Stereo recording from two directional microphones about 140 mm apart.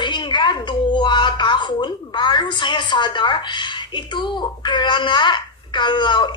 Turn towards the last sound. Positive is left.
turn(degrees=35)  # may be behind; listen again after turning